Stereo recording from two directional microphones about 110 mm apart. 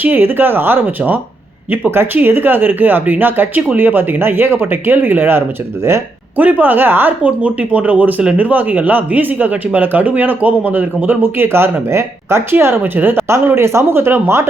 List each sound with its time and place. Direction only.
0.0 s speech: 20° right (ahead or behind)